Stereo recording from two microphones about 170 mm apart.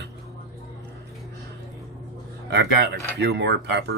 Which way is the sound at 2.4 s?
90° right.